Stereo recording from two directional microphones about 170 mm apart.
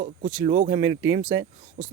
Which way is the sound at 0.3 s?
25° right (ahead or behind).